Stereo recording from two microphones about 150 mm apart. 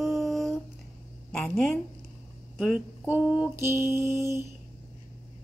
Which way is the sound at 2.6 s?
5° right (ahead or behind).